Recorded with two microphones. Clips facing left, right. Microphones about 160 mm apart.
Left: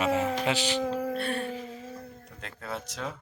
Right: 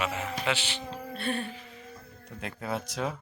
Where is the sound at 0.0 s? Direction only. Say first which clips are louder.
Left 5 dB; 40° left (ahead or behind).